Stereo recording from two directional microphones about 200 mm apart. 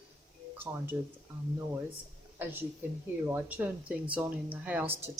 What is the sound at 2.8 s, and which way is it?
Speech, 10° right (ahead or behind).